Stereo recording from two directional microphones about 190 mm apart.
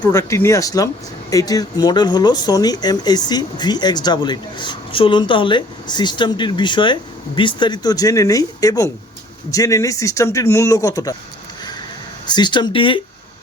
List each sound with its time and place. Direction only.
0.0 s speech: 15° left (ahead or behind)
12.2 s speech: 20° left (ahead or behind)